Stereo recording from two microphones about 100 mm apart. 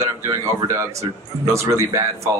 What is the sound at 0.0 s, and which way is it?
Speech, 30° right (ahead or behind).